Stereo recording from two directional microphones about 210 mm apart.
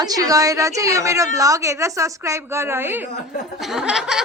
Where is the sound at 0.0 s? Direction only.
15° right (ahead or behind).